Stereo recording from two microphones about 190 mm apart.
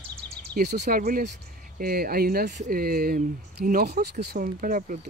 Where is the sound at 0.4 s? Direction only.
60° right (ahead or behind).